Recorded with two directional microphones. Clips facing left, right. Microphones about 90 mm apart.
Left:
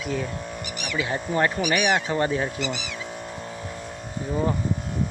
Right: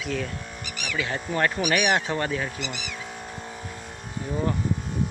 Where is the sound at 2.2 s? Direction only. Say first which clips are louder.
Left 4 dB; 20° left (ahead or behind).